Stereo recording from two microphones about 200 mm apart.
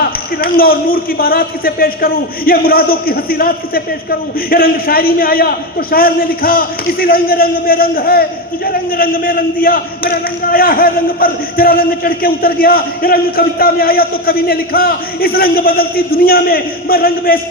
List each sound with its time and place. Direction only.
0.3 s a man's voice: 45° left (ahead or behind)